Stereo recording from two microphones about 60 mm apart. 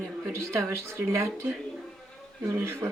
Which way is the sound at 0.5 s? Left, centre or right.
Right.